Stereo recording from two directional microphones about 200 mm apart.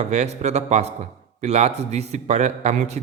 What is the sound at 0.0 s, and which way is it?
Speech, 35° right (ahead or behind).